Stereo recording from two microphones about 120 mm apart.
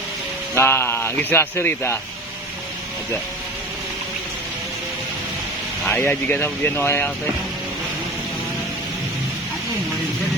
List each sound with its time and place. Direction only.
0.5 s speech: 20° left (ahead or behind)
5.8 s speech: 15° left (ahead or behind)